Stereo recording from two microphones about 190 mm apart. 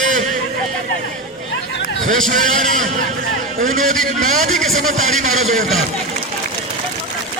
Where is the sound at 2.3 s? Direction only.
40° right (ahead or behind).